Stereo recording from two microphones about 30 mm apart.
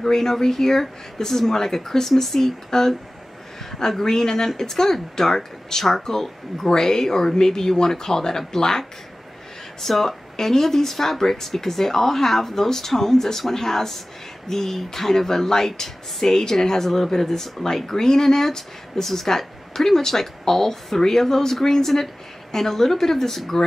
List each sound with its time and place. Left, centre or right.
0.0 s speech: centre